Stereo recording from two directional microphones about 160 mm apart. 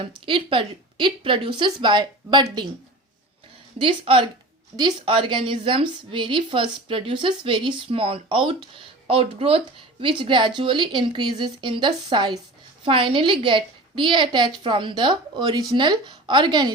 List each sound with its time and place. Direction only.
0.3 s a woman's voice: 30° right (ahead or behind)
3.8 s a woman's voice: 35° right (ahead or behind)